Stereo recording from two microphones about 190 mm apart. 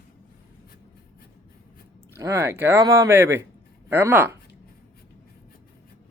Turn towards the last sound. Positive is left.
turn(degrees=-10)  # may be behind; listen again after turning